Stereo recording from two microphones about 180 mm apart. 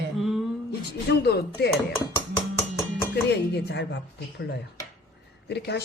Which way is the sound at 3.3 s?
75° left (ahead or behind).